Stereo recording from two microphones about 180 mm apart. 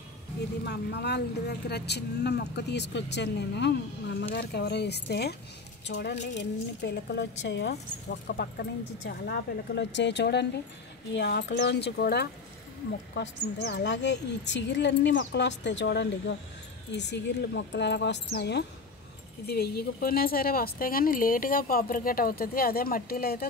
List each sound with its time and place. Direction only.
0.7 s speech: 70° left (ahead or behind)
13.1 s a woman's voice: 75° left (ahead or behind); by 23.4 s 55° left (ahead or behind)